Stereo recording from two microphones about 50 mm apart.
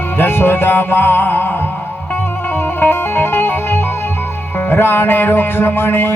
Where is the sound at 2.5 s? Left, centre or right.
Left.